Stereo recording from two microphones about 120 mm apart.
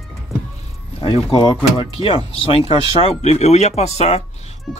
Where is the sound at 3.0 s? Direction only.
65° left (ahead or behind).